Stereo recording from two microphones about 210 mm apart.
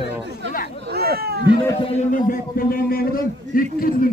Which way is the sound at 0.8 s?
50° right (ahead or behind).